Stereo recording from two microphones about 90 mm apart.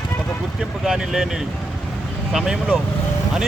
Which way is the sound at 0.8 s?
5° right (ahead or behind).